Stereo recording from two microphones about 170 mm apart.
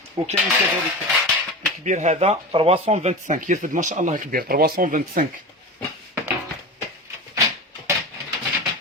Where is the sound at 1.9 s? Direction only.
45° right (ahead or behind).